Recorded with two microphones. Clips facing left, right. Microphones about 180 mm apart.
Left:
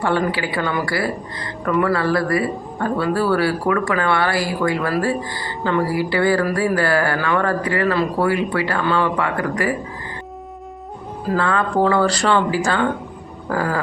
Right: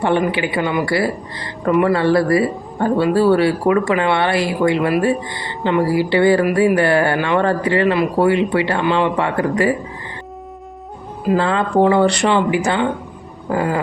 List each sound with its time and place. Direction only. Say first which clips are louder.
0.0 s speech: right 3 dB; 20° right (ahead or behind)
11.3 s speech: right 3 dB; 25° right (ahead or behind)